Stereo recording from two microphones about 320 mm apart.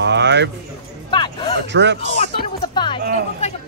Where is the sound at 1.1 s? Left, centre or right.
Centre.